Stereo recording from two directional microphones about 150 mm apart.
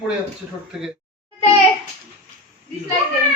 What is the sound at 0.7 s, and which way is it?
Speech, 5° right (ahead or behind).